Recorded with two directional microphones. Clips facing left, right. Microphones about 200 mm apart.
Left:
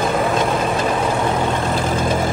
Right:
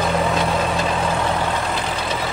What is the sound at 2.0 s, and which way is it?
Vehicle, 50° left (ahead or behind).